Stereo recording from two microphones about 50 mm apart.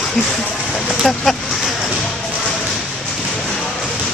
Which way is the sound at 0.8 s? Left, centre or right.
Centre.